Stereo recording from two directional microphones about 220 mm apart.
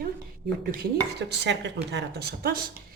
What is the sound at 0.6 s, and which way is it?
Dishes, 40° right (ahead or behind).